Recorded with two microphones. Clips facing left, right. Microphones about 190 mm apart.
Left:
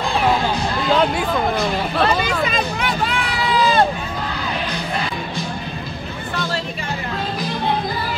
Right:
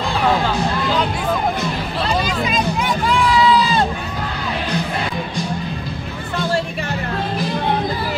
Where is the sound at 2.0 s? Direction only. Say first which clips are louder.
Left 1 dB; 60° left (ahead or behind).